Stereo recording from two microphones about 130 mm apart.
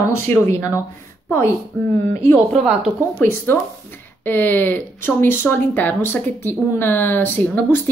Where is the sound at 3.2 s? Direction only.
15° left (ahead or behind).